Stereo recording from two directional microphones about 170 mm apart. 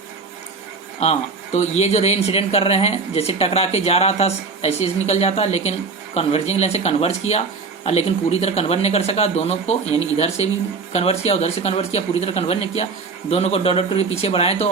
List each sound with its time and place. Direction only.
1.0 s speech: 40° left (ahead or behind)